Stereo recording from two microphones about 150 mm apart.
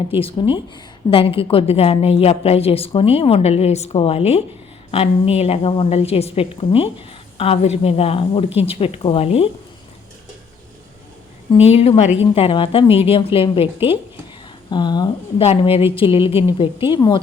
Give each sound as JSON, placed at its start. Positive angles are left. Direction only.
{"t": 0.2, "sound": "a woman's voice", "side_deg": 35}
{"t": 11.5, "sound": "a woman's voice", "side_deg": 40}
{"t": 15.4, "sound": "a woman's voice", "side_deg": 40}